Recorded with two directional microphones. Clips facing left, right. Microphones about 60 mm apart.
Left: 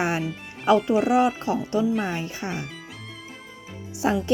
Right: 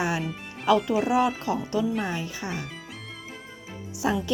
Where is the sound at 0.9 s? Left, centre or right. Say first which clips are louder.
Left 3 dB; left.